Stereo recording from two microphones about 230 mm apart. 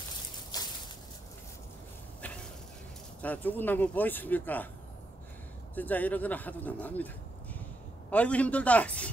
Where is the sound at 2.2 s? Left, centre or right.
Centre.